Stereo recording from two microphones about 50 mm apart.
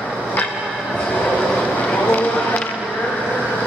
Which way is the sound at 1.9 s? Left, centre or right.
Left.